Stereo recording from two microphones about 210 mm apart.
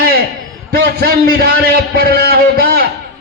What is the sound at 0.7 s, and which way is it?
A man's voice, 50° right (ahead or behind).